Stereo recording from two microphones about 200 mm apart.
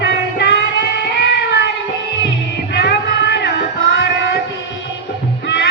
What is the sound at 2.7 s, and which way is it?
Crowd, 60° left (ahead or behind).